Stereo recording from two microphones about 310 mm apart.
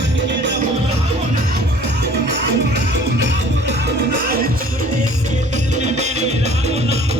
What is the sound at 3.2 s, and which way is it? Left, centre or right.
Music, right.